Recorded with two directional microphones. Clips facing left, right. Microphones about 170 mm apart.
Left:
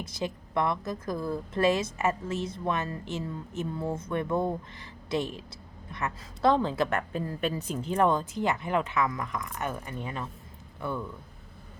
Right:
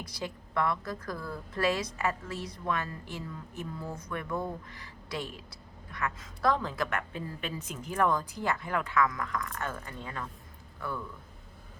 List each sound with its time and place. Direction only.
0.0 s a woman's voice: 20° left (ahead or behind)